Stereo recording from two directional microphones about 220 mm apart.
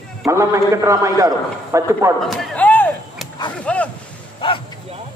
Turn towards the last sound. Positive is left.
turn(degrees=20)  # may be behind; listen again after turning